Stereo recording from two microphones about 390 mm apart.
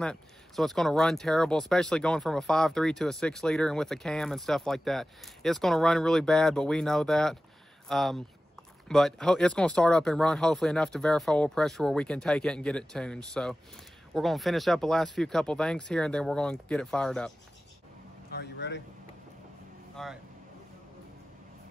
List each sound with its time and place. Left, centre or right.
0.0 s speech: centre
18.3 s speech: left
20.0 s speech: centre